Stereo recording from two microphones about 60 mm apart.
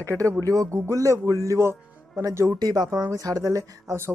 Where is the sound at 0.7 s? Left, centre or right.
Right.